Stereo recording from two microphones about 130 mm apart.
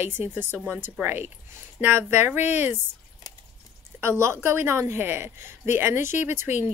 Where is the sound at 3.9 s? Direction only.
20° right (ahead or behind).